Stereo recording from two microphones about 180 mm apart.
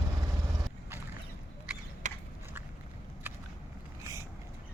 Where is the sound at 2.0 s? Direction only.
40° right (ahead or behind).